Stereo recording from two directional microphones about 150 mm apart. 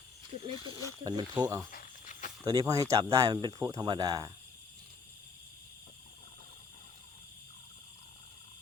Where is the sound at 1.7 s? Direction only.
60° left (ahead or behind).